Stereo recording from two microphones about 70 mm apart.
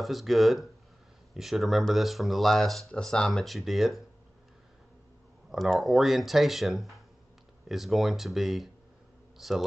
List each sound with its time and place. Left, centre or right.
0.0 s speech: centre
5.5 s speech: centre